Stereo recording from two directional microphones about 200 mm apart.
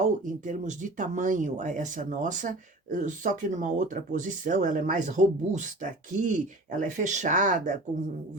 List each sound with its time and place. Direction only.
0.0 s speech: 40° right (ahead or behind)